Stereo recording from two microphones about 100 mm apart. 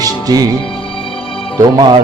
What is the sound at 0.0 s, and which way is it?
Music, 35° right (ahead or behind).